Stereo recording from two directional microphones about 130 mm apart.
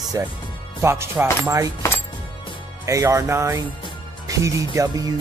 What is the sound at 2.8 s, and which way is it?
Music, 25° right (ahead or behind).